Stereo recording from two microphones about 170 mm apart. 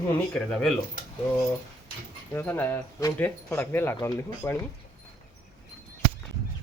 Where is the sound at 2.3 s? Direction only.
15° left (ahead or behind).